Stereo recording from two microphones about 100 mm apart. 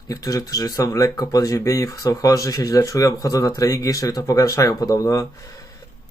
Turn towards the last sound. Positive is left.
turn(degrees=30)  # may be behind; listen again after turning